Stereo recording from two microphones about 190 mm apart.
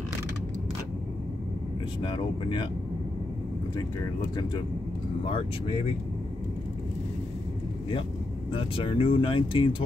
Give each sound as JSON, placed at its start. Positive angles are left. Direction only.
{"t": 2.0, "sound": "speech", "side_deg": 25}
{"t": 8.5, "sound": "speech", "side_deg": 30}